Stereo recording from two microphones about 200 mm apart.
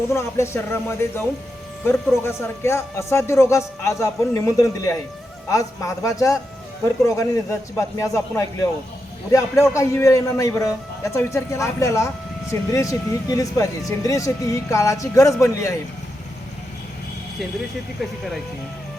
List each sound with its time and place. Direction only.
0.1 s a man's voice: 15° left (ahead or behind)
7.8 s a man's voice: 15° left (ahead or behind)